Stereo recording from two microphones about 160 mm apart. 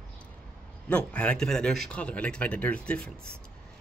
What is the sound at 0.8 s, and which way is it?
Speech, 10° left (ahead or behind).